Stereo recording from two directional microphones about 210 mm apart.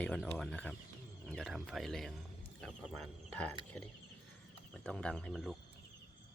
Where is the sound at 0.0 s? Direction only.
5° left (ahead or behind).